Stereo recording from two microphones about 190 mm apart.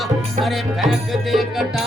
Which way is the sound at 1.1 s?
Centre (ahead or behind).